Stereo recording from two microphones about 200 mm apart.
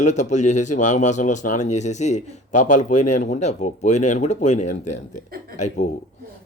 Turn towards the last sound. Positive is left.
turn(degrees=35)  # may be behind; listen again after turning